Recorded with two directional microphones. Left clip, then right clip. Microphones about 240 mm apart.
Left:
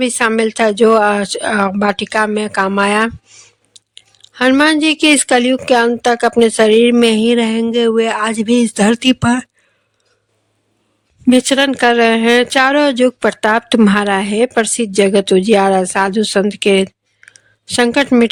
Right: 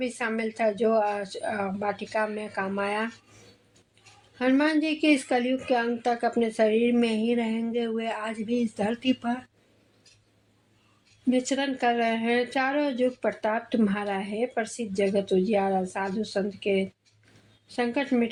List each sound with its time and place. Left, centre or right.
0.0 s speech: left
4.4 s speech: left
11.3 s speech: left